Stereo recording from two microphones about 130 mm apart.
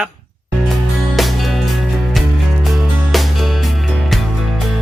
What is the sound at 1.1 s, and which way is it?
Music, centre (ahead or behind).